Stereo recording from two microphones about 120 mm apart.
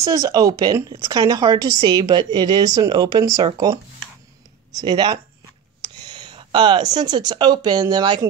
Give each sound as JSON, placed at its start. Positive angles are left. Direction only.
{"t": 0.0, "sound": "a woman's voice", "side_deg": -30}